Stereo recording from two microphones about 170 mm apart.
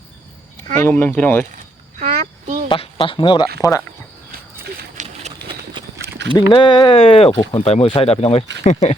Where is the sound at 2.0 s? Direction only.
45° right (ahead or behind).